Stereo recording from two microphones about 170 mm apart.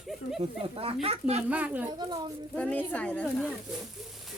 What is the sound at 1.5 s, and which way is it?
Speech, 10° right (ahead or behind).